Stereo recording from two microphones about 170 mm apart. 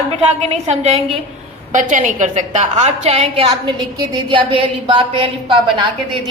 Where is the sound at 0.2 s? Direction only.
40° right (ahead or behind).